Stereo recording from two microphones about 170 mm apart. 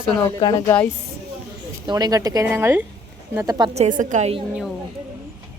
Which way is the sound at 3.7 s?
45° right (ahead or behind).